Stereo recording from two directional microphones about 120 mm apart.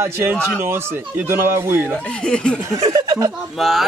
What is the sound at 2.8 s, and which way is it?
Speech, 30° right (ahead or behind).